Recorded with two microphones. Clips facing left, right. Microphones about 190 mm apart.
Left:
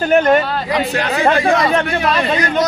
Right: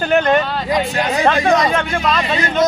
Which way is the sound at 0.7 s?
65° left (ahead or behind).